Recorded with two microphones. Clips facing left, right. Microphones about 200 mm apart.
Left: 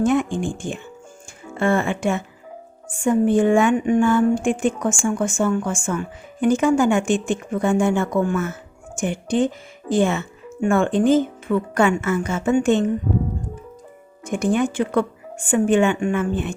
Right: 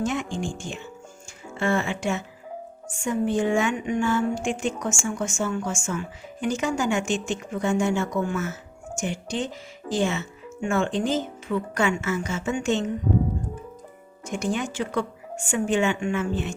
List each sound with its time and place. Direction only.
0.0 s a woman's voice: 55° left (ahead or behind)
14.3 s speech: 55° left (ahead or behind)